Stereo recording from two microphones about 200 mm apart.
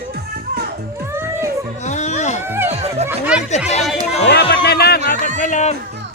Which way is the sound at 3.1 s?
5° right (ahead or behind).